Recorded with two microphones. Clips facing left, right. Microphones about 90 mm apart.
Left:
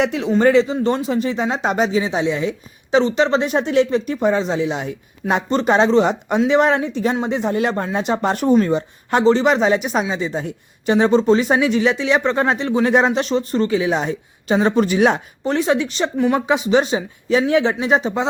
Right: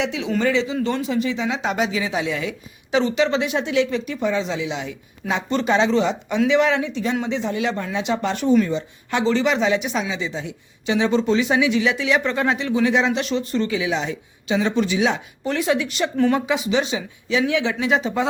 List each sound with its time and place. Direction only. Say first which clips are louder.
0.0 s speech: left 6 dB; 50° left (ahead or behind)
0.8 s speech: left 3 dB; 35° left (ahead or behind); by 15.2 s 50° left (ahead or behind)
15.4 s speech: left 3 dB; 35° left (ahead or behind)
16.1 s speech: left 1 dB; 20° left (ahead or behind)
16.5 s speech: left 5 dB; 35° left (ahead or behind)